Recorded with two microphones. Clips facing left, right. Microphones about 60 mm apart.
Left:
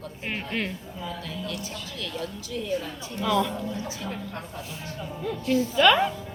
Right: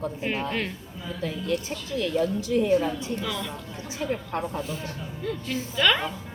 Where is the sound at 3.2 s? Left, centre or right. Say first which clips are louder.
Left 7 dB; centre.